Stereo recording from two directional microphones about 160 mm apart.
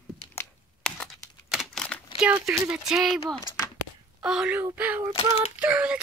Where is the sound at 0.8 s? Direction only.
5° left (ahead or behind).